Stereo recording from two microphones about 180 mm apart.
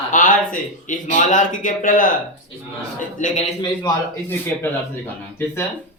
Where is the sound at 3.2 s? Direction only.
40° left (ahead or behind).